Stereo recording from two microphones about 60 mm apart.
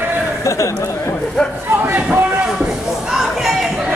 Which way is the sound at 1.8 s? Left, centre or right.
Right.